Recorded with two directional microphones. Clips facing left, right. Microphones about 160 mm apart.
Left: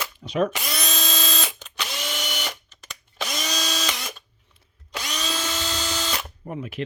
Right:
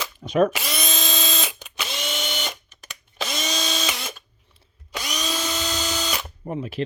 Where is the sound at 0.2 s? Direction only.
50° right (ahead or behind).